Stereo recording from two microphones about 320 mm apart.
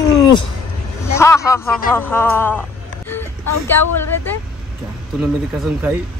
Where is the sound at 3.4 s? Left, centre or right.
Left.